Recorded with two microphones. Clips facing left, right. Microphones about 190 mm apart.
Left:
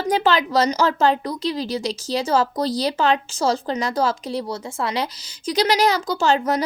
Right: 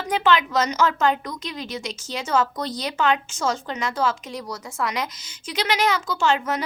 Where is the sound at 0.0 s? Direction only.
40° left (ahead or behind).